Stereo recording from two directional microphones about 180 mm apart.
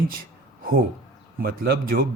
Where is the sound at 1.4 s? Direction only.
55° right (ahead or behind).